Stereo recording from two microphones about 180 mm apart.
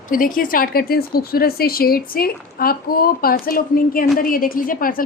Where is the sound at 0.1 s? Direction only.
50° left (ahead or behind).